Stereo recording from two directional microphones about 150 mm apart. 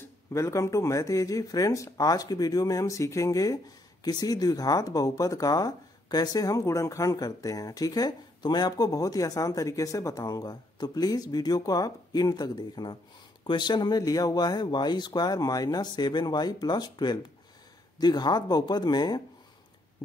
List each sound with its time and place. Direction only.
0.3 s speech: 20° left (ahead or behind)